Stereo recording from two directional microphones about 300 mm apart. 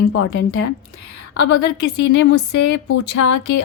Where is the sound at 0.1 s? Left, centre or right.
Left.